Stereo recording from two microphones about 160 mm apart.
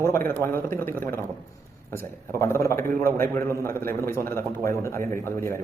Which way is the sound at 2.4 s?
20° left (ahead or behind).